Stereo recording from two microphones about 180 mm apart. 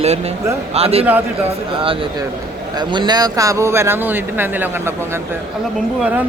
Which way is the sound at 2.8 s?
25° right (ahead or behind).